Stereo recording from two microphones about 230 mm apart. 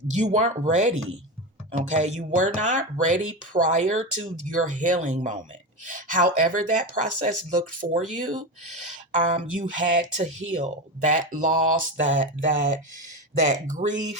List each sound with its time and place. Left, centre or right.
0.2 s speech: right